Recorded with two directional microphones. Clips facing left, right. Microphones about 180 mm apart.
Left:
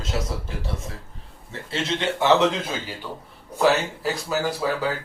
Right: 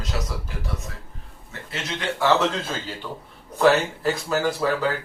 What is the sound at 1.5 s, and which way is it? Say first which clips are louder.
A man's voice: left 5 dB; 30° left (ahead or behind).